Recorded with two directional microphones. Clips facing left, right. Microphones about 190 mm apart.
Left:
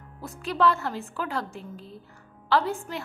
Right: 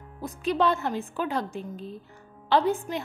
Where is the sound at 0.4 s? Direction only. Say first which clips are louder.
Even; 20° right (ahead or behind).